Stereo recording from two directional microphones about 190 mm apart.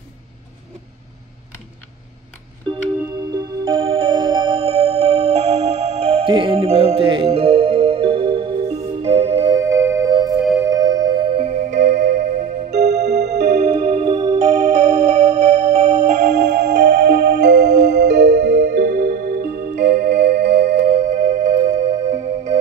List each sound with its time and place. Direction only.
3.3 s music: 20° right (ahead or behind)
10.4 s music: 5° right (ahead or behind)
10.7 s music: 20° right (ahead or behind)
11.7 s music: 60° right (ahead or behind)
12.7 s music: 40° right (ahead or behind)
16.2 s music: 60° right (ahead or behind)
20.9 s music: 40° right (ahead or behind)